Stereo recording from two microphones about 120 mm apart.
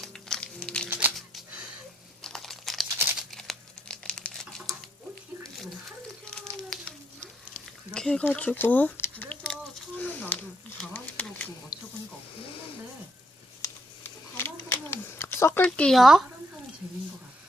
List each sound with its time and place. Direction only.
0.0 s music: 5° left (ahead or behind)
0.9 s music: 15° right (ahead or behind)
2.2 s crumpling: 5° left (ahead or behind)
6.3 s a sound: 5° left (ahead or behind)
7.9 s speech: 5° left (ahead or behind)
10.0 s a sound: 15° left (ahead or behind)
13.6 s a sound: 20° left (ahead or behind)
15.6 s speech: 10° left (ahead or behind)
16.0 s speech: centre (ahead or behind)